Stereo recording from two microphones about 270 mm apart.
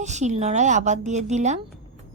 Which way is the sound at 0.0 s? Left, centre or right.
Right.